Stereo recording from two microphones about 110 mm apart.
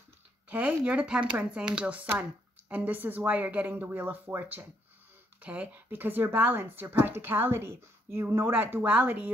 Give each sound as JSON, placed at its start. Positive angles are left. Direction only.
{"t": 0.5, "sound": "a woman's voice", "side_deg": -15}